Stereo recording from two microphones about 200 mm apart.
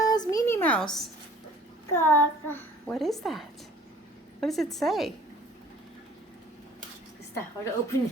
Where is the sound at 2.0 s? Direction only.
10° left (ahead or behind).